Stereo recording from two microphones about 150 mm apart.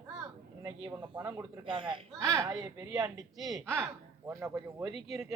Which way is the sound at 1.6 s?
35° right (ahead or behind).